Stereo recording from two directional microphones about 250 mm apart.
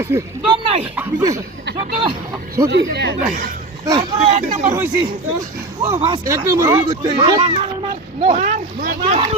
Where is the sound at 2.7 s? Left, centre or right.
Right.